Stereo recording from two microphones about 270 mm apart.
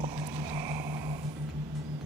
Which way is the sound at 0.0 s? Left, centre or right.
Centre.